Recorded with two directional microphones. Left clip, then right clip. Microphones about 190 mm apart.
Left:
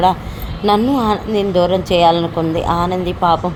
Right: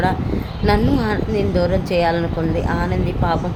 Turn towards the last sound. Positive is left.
turn(degrees=15)  # may be behind; listen again after turning